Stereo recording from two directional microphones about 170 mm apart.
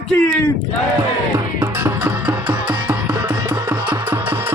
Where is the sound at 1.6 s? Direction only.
15° right (ahead or behind).